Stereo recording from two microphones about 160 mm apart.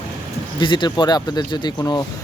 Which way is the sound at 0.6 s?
30° left (ahead or behind).